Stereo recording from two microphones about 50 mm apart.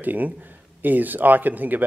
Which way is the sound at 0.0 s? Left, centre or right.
Right.